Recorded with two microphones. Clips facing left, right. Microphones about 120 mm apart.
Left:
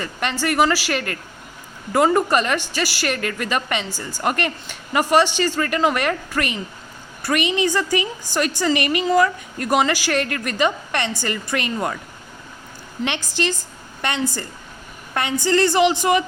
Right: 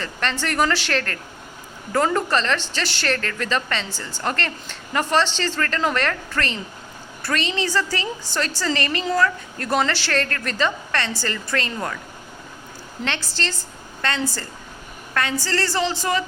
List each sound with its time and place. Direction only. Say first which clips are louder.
0.0 s a woman's voice: left 2 dB; 10° left (ahead or behind)
13.1 s a woman's voice: left 4 dB; 15° left (ahead or behind)